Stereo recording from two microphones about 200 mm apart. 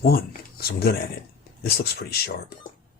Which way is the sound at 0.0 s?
50° left (ahead or behind).